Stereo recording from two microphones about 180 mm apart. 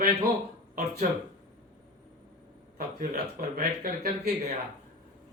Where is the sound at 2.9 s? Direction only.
55° right (ahead or behind).